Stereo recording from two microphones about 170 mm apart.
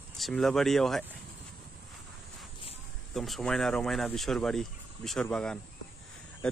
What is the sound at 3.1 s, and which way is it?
Speech, centre (ahead or behind).